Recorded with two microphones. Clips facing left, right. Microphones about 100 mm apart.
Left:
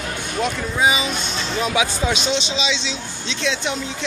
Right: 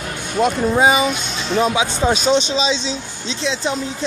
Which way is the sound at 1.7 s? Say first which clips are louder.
Right 2 dB; 25° right (ahead or behind).